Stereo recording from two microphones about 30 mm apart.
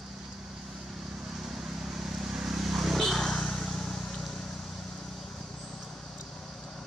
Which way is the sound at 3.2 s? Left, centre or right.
Centre.